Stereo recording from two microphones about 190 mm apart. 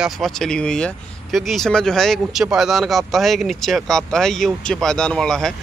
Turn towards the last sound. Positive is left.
turn(degrees=5)  # may be behind; listen again after turning